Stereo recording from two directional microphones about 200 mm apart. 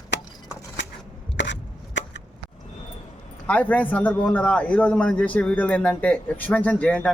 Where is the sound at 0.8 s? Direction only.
65° left (ahead or behind).